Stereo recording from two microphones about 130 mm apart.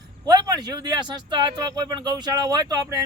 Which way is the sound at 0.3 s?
30° right (ahead or behind).